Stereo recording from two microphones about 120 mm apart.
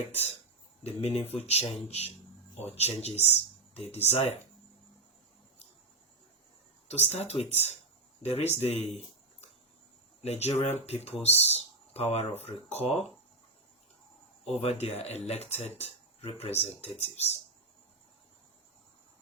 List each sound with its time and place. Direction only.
0.9 s speech: 60° left (ahead or behind)
6.8 s speech: 65° left (ahead or behind)
10.2 s speech: 60° left (ahead or behind)
14.5 s speech: 60° left (ahead or behind)